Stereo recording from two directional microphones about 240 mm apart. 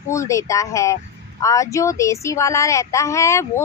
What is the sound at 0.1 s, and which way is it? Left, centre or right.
Speech, centre.